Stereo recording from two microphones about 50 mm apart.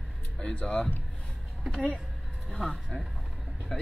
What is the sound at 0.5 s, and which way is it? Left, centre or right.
Speech, left.